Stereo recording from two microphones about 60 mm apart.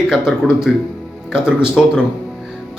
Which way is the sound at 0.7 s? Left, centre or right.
Centre.